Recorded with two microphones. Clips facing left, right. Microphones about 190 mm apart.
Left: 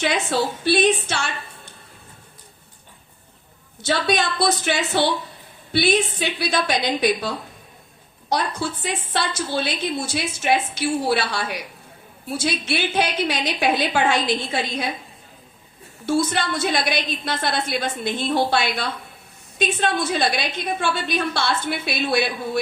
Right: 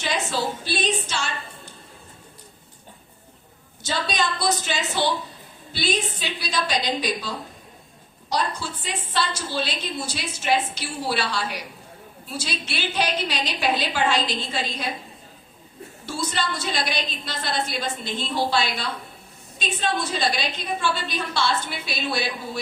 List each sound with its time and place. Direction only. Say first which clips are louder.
0.0 s a woman's voice: left 4 dB; 60° left (ahead or behind)
3.8 s a woman's voice: left 5 dB; 60° left (ahead or behind)
16.0 s a woman's voice: left 7 dB; 55° left (ahead or behind)